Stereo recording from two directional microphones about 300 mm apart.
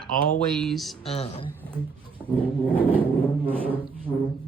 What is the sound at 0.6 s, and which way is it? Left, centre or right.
Speech, centre.